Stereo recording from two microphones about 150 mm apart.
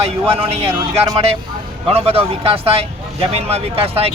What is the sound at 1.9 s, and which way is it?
Speech, 40° right (ahead or behind).